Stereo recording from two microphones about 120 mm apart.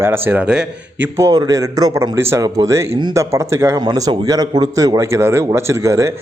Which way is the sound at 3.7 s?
35° right (ahead or behind).